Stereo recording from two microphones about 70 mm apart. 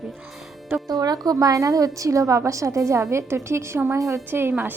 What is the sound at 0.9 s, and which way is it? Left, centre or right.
A woman's voice, right.